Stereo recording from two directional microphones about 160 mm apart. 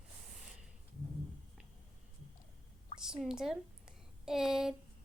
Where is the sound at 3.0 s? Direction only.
5° right (ahead or behind).